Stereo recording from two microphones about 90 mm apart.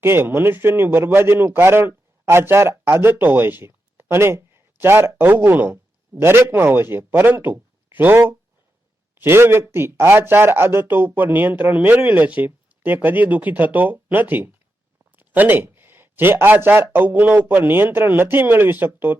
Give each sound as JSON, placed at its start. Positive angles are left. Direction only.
{"t": 0.0, "sound": "a man's voice", "side_deg": -25}